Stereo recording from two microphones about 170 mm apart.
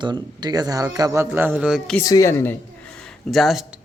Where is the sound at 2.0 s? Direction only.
20° left (ahead or behind).